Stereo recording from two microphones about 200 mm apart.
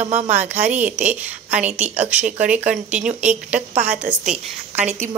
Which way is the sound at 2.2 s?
5° right (ahead or behind).